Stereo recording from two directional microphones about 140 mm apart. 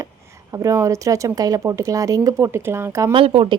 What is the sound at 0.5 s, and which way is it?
Speech, 20° right (ahead or behind).